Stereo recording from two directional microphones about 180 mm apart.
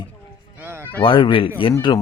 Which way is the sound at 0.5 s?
10° right (ahead or behind).